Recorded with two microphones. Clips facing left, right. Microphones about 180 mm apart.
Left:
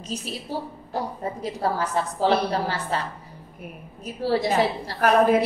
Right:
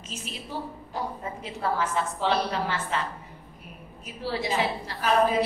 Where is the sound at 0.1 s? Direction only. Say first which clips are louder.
Left 6 dB; 35° left (ahead or behind).